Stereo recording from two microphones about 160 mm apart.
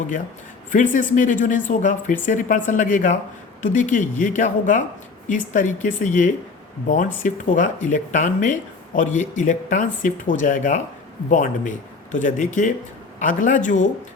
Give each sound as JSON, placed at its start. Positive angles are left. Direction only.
{"t": 0.7, "sound": "speech", "side_deg": 55}